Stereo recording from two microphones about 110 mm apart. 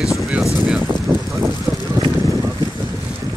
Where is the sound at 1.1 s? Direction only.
15° right (ahead or behind).